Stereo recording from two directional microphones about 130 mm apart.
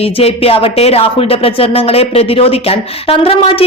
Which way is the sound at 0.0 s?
50° left (ahead or behind).